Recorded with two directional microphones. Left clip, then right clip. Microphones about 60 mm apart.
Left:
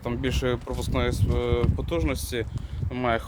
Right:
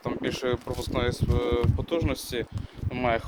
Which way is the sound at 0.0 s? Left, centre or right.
Left.